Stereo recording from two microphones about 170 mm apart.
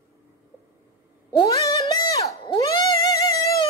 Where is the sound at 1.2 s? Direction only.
20° left (ahead or behind).